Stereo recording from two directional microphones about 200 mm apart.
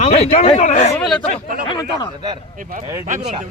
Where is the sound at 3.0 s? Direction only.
40° right (ahead or behind).